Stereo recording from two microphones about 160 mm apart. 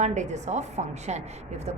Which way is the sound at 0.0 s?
45° right (ahead or behind).